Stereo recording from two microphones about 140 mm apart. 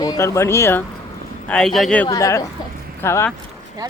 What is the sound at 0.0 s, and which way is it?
Speech, 25° left (ahead or behind).